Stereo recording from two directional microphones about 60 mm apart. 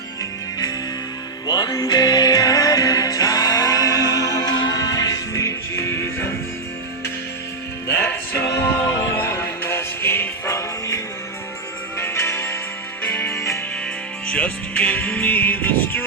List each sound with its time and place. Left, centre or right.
1.5 s music: left
7.9 s music: left
10.5 s music: left
11.9 s music: left
14.3 s music: left